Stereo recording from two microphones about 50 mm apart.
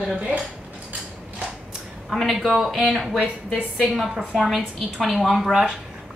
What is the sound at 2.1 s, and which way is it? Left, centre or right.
A woman's voice, centre.